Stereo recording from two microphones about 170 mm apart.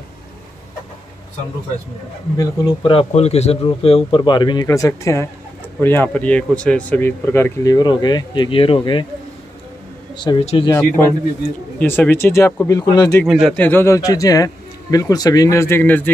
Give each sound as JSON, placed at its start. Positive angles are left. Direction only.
{"t": 2.3, "sound": "a man's voice", "side_deg": 20}
{"t": 2.9, "sound": "a man's voice", "side_deg": 35}
{"t": 10.1, "sound": "speech", "side_deg": 25}
{"t": 10.4, "sound": "speech", "side_deg": 35}
{"t": 11.8, "sound": "speech", "side_deg": 10}
{"t": 13.2, "sound": "speech", "side_deg": 0}
{"t": 13.6, "sound": "a man's voice", "side_deg": 10}